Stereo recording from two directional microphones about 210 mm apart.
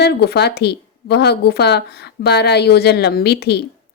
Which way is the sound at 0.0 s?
50° left (ahead or behind).